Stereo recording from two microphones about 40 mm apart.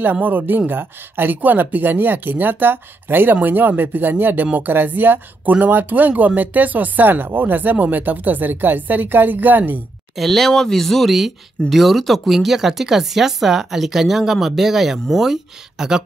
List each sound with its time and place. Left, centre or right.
0.0 s a woman's voice: right
1.3 s a woman's voice: right
10.1 s speech: centre